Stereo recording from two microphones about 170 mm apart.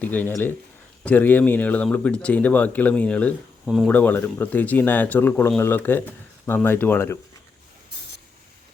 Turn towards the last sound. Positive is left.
turn(degrees=15)  # may be behind; listen again after turning